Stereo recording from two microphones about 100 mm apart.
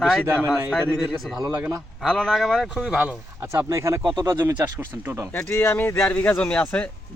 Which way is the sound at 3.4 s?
25° right (ahead or behind).